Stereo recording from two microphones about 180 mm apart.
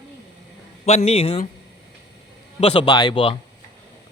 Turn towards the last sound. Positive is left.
turn(degrees=30)  # may be behind; listen again after turning